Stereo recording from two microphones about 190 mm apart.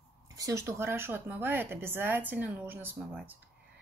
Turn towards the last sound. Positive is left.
turn(degrees=-10)  # may be behind; listen again after turning